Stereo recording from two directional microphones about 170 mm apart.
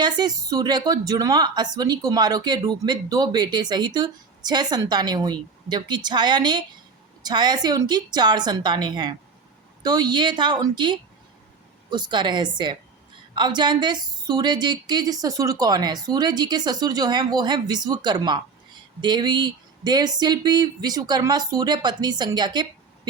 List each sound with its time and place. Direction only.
0.2 s a woman's voice: 25° right (ahead or behind)